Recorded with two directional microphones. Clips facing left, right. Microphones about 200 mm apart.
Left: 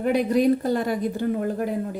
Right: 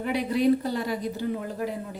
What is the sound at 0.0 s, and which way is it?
A woman's voice, 45° left (ahead or behind).